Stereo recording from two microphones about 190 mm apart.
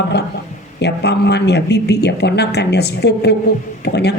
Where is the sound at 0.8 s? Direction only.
65° left (ahead or behind).